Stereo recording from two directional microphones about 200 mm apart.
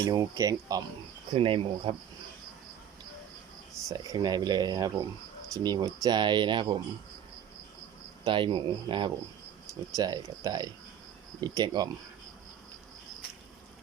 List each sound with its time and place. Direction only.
0.0 s speech: 15° right (ahead or behind)
3.8 s speech: 20° right (ahead or behind)
8.2 s speech: 25° right (ahead or behind)